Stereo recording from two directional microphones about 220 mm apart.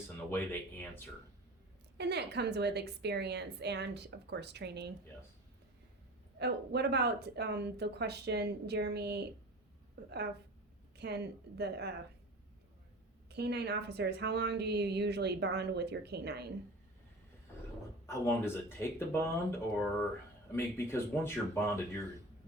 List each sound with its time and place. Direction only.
0.3 s speech: 10° left (ahead or behind)
2.0 s a woman's voice: 50° right (ahead or behind)
6.4 s a woman's voice: 50° right (ahead or behind)
13.3 s a woman's voice: 50° right (ahead or behind)
18.0 s speech: 10° left (ahead or behind)
20.7 s speech: 10° left (ahead or behind)